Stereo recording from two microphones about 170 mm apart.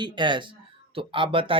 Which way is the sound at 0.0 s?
30° right (ahead or behind).